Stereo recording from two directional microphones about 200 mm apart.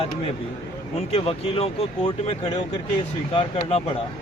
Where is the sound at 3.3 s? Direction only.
30° left (ahead or behind).